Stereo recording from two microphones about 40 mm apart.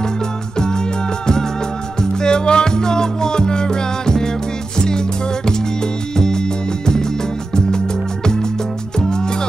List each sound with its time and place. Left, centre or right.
0.6 s music: centre
9.0 s music: centre